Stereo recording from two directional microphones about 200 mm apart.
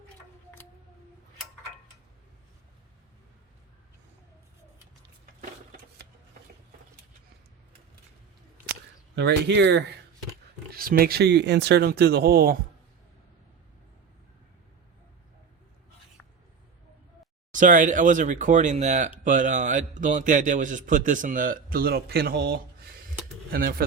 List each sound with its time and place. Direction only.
9.1 s speech: 60° right (ahead or behind)
17.5 s a man's voice: 40° right (ahead or behind)